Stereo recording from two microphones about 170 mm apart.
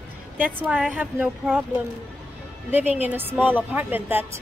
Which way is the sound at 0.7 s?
5° right (ahead or behind).